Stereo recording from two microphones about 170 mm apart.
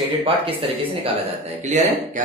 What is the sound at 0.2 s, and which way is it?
A man's voice, 35° right (ahead or behind).